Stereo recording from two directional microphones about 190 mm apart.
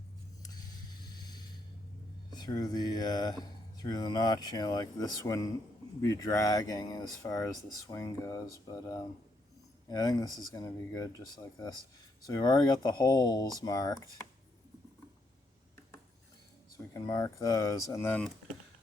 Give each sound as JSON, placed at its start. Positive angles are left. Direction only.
{"t": 1.2, "sound": "a sound", "side_deg": 20}
{"t": 2.3, "sound": "speech", "side_deg": 20}
{"t": 16.7, "sound": "speech", "side_deg": 20}